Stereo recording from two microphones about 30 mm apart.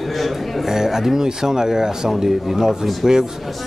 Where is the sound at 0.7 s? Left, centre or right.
Centre.